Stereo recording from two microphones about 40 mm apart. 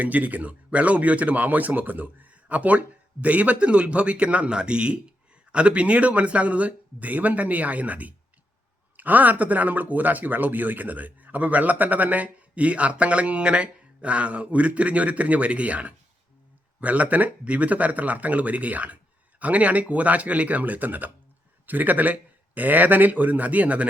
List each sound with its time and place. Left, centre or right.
0.0 s speech: right